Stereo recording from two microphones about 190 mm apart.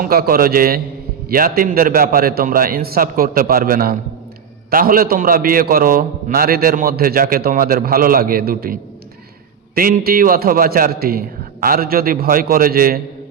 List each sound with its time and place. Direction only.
0.0 s a man's voice: 50° right (ahead or behind)